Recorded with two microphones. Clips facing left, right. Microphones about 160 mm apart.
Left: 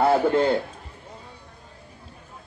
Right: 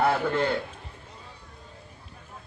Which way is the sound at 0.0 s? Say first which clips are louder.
Left 5 dB; 35° left (ahead or behind).